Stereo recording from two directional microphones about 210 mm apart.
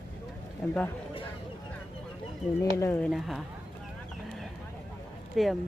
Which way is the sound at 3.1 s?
Centre (ahead or behind).